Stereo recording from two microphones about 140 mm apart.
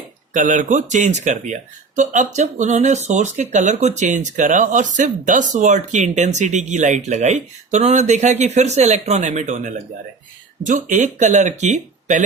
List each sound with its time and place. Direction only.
0.3 s speech: 65° right (ahead or behind)